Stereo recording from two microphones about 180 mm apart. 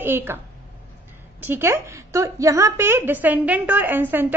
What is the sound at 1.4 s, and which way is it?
A woman's voice, 10° right (ahead or behind).